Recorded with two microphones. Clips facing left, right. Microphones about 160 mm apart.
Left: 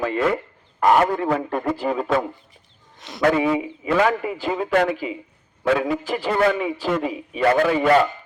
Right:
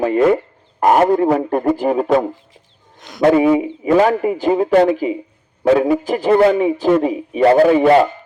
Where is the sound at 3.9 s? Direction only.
40° right (ahead or behind).